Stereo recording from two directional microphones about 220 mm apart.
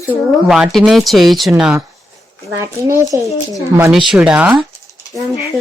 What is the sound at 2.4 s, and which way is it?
Speech, 15° right (ahead or behind).